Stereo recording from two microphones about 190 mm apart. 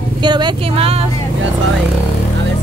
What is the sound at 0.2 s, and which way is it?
Speech, 25° right (ahead or behind).